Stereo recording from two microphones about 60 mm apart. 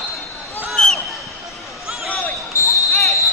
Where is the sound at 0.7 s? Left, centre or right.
Centre.